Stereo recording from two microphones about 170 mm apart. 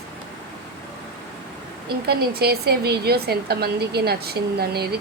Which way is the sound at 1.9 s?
70° right (ahead or behind).